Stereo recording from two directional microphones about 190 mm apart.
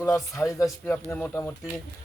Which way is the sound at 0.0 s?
15° left (ahead or behind).